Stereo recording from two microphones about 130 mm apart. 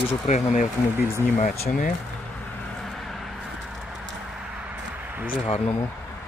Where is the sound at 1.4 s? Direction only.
90° left.